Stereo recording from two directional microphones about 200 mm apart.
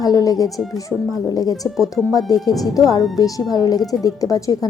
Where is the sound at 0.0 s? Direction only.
20° left (ahead or behind).